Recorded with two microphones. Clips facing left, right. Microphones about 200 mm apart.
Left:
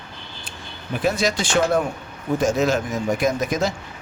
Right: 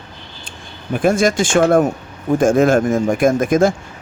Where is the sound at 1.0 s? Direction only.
50° right (ahead or behind).